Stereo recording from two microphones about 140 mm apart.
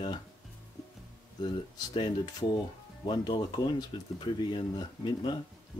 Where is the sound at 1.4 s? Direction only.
35° left (ahead or behind).